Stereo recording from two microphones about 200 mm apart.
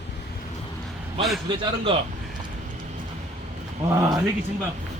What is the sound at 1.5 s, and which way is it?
Speech, 25° right (ahead or behind).